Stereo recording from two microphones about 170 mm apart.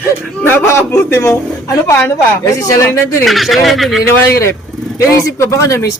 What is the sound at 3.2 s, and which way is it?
Speech, centre (ahead or behind).